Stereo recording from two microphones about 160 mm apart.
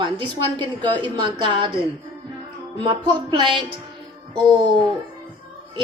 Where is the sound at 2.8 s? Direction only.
30° right (ahead or behind).